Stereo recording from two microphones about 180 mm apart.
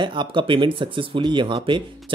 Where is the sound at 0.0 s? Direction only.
25° right (ahead or behind).